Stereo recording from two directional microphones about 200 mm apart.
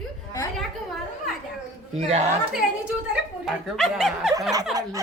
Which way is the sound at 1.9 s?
30° right (ahead or behind).